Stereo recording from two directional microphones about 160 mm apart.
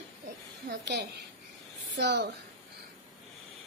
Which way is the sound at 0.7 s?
90° right.